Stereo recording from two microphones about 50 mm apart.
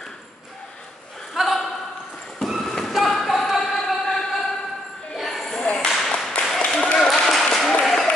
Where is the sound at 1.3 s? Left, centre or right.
Centre.